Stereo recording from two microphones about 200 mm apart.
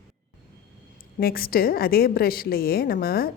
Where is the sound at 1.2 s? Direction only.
45° left (ahead or behind).